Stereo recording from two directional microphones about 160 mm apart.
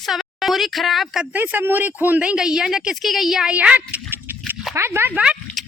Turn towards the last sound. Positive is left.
turn(degrees=-10)  # may be behind; listen again after turning